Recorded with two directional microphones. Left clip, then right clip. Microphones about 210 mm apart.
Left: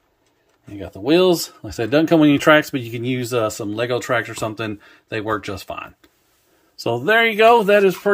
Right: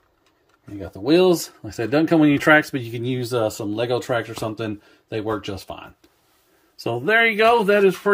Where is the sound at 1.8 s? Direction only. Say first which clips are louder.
Left 3 dB; 25° left (ahead or behind).